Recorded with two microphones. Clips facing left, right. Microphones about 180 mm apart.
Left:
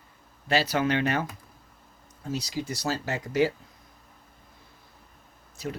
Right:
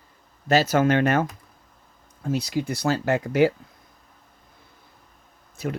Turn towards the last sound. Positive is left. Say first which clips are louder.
# right 5 dB
turn(degrees=-55)  # may be behind; listen again after turning